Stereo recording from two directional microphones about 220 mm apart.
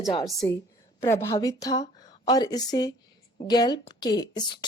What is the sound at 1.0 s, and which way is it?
A woman's voice, 15° left (ahead or behind).